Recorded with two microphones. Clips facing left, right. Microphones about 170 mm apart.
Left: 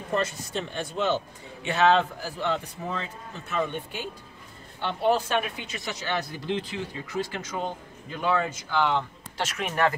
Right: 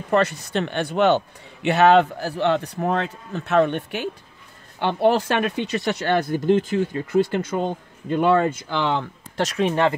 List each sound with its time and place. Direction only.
0.1 s a man's voice: 70° right (ahead or behind); by 9.0 s 90° right
9.4 s speech: 35° right (ahead or behind)